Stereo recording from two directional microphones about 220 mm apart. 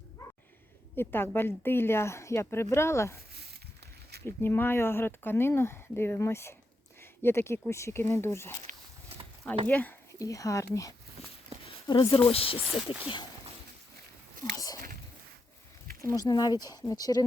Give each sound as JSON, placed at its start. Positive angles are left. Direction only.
{"t": 0.9, "sound": "speech", "side_deg": 10}
{"t": 4.3, "sound": "speech", "side_deg": 10}
{"t": 7.0, "sound": "a sound", "side_deg": 10}
{"t": 7.7, "sound": "speech", "side_deg": 10}
{"t": 9.6, "sound": "speech", "side_deg": 5}
{"t": 11.2, "sound": "a sound", "side_deg": 30}
{"t": 11.9, "sound": "speech", "side_deg": 20}
{"t": 14.5, "sound": "a sound", "side_deg": 15}
{"t": 16.0, "sound": "speech", "side_deg": 15}